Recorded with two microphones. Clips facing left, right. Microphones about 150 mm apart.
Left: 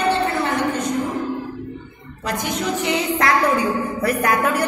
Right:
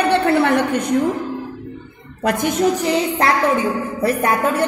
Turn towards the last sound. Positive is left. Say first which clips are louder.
# right 2 dB
turn(degrees=-25)  # may be behind; listen again after turning